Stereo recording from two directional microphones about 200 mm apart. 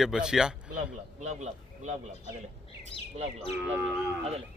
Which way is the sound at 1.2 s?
35° right (ahead or behind).